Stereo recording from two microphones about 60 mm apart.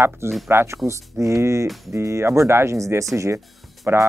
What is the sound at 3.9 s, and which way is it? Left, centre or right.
Speech, right.